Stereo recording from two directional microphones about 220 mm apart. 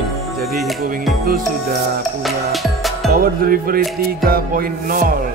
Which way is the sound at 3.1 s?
40° right (ahead or behind).